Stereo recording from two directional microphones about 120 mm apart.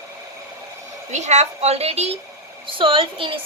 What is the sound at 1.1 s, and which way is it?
A woman's voice, 70° right (ahead or behind).